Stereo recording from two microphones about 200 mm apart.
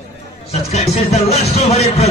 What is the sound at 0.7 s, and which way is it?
Music, 35° left (ahead or behind).